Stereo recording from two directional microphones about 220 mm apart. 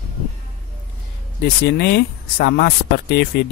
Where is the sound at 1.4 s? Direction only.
50° left (ahead or behind).